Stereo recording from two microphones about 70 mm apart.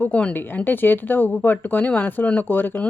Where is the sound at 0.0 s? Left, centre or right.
Centre.